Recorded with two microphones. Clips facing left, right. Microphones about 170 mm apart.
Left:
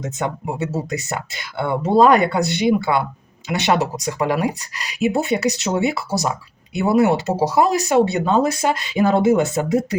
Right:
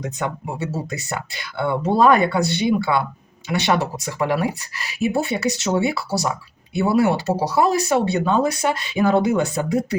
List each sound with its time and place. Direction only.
0.0 s speech: 20° left (ahead or behind)